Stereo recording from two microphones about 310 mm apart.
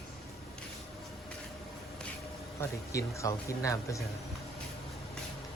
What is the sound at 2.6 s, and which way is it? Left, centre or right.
Speech, centre.